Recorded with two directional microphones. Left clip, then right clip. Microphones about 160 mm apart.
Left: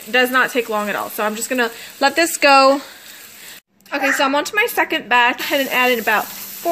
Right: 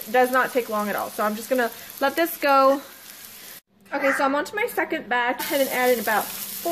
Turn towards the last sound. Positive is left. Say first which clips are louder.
# left 5 dB
turn(degrees=55)  # may be behind; listen again after turning